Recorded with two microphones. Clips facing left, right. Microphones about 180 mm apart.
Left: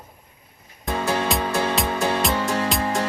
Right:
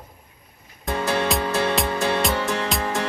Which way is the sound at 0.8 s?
Centre (ahead or behind).